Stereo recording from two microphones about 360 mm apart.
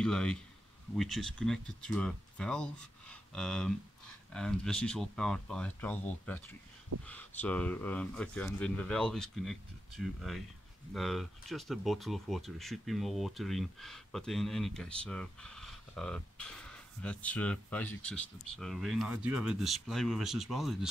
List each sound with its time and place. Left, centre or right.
0.0 s speech: centre